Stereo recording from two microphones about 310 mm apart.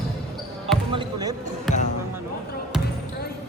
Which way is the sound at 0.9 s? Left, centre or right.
Centre.